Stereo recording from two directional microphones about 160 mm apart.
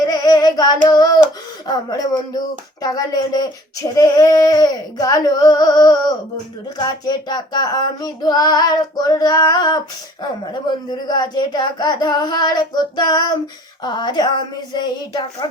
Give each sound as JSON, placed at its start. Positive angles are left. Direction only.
{"t": 0.0, "sound": "singing", "side_deg": 25}
{"t": 0.9, "sound": "child singing", "side_deg": 25}
{"t": 1.6, "sound": "female singing", "side_deg": 25}